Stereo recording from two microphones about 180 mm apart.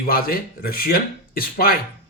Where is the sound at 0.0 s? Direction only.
55° left (ahead or behind).